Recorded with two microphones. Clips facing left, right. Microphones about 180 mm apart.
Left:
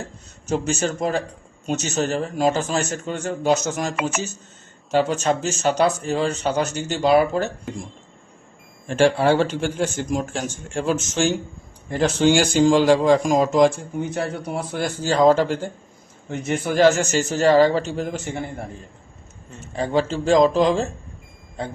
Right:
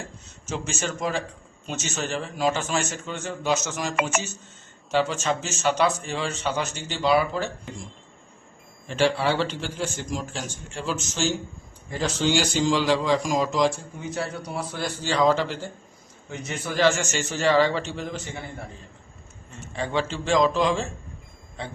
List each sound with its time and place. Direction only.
0.4 s a man's voice: 40° left (ahead or behind)
8.9 s a man's voice: 50° left (ahead or behind)
19.7 s a man's voice: 40° left (ahead or behind)